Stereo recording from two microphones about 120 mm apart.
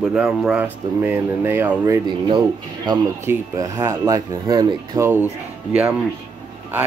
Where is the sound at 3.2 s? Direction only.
20° right (ahead or behind).